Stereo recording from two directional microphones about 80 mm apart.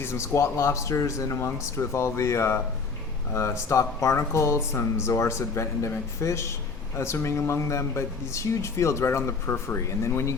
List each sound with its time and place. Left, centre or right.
0.0 s speech: left